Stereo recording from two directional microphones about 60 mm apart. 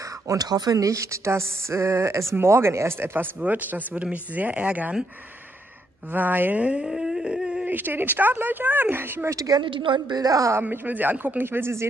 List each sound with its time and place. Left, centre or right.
0.3 s speech: right
3.3 s speech: right
6.1 s speech: right
6.6 s speech: centre
6.9 s dog: centre
7.6 s speech: right
9.3 s a woman's voice: right
10.7 s speech: right